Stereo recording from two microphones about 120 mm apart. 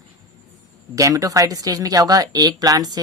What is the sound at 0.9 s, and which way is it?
Speech, 25° right (ahead or behind).